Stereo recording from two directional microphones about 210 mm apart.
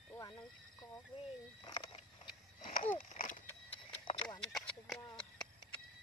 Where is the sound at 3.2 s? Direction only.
35° left (ahead or behind).